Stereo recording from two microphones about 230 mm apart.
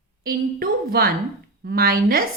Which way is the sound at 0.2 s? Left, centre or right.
Right.